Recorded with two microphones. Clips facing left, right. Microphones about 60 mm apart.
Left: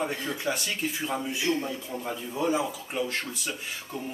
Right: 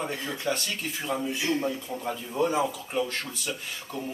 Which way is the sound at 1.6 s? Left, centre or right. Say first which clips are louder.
Right 3 dB; centre.